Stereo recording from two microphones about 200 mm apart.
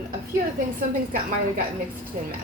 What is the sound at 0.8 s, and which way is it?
Speech, 45° right (ahead or behind).